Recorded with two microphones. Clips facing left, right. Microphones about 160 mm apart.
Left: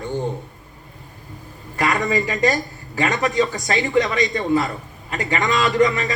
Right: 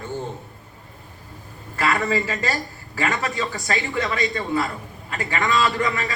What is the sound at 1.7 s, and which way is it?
A man's voice, 15° left (ahead or behind).